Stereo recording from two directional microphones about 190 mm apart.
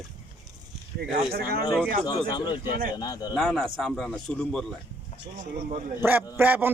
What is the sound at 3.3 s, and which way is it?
Speech, centre (ahead or behind).